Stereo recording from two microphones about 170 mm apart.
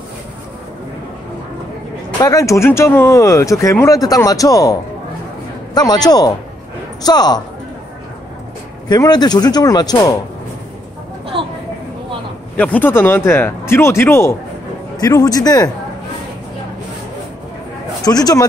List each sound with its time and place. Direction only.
2.2 s speech: 20° left (ahead or behind)
5.8 s speech: 25° left (ahead or behind)
8.8 s speech: 25° left (ahead or behind)
11.3 s a sound: 30° right (ahead or behind)
12.5 s speech: 10° left (ahead or behind)
18.0 s speech: 20° left (ahead or behind)